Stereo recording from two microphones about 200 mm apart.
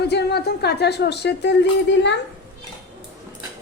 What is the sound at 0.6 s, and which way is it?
Speech, 55° left (ahead or behind).